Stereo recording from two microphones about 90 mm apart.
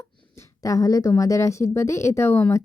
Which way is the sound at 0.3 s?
35° left (ahead or behind).